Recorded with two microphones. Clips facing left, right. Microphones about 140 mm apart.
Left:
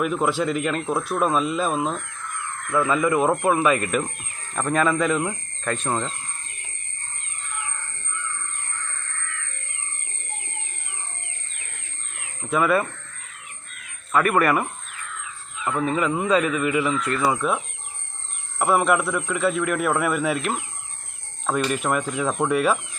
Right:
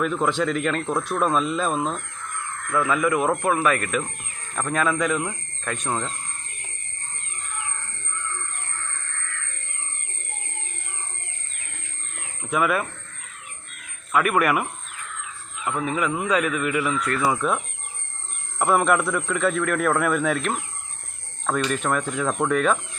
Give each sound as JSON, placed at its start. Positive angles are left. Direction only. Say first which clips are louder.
{"t": 0.0, "sound": "a man's voice", "louder": "even", "side_deg": 10}
{"t": 3.2, "sound": "speech", "louder": "left 2 dB", "side_deg": 5}
{"t": 4.5, "sound": "a man's voice", "louder": "left 2 dB", "side_deg": 0}
{"t": 12.4, "sound": "speech", "louder": "left 2 dB", "side_deg": -5}
{"t": 14.1, "sound": "a man's voice", "louder": "left 1 dB", "side_deg": -5}
{"t": 18.6, "sound": "a man's voice", "louder": "even", "side_deg": 0}